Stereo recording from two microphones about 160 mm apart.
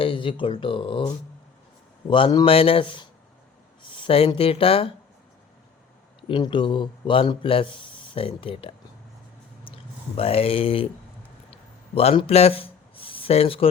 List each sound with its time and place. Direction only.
0.0 s speech: 30° left (ahead or behind)
6.2 s speech: 30° left (ahead or behind)
11.5 s a sound: 40° left (ahead or behind)